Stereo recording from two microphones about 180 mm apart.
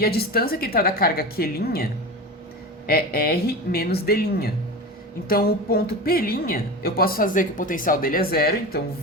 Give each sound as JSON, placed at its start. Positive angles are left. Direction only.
{"t": 0.0, "sound": "a woman's voice", "side_deg": 60}